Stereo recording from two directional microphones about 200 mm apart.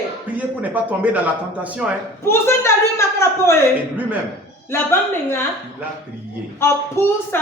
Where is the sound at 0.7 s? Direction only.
5° right (ahead or behind).